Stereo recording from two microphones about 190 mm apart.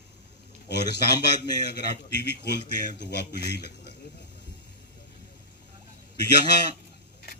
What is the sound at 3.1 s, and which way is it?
Speech, 60° left (ahead or behind).